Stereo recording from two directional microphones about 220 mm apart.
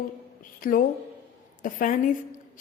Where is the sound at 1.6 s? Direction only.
35° left (ahead or behind).